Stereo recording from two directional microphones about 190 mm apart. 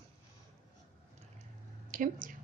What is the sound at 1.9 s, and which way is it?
Speech, 45° right (ahead or behind).